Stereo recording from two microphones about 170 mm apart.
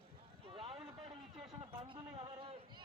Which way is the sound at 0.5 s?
35° right (ahead or behind).